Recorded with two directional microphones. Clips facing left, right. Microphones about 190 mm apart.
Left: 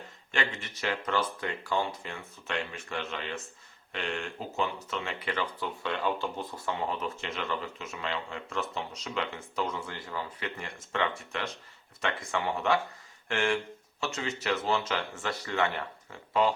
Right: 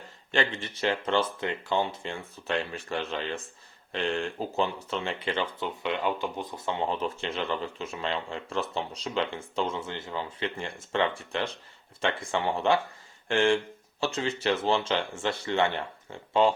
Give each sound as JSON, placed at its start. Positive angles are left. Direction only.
{"t": 0.3, "sound": "speech", "side_deg": -30}